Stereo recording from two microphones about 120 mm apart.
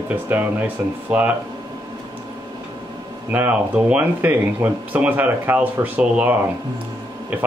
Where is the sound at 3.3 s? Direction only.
15° right (ahead or behind).